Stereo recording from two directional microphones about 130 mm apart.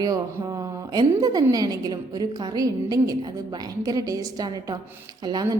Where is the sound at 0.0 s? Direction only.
30° right (ahead or behind).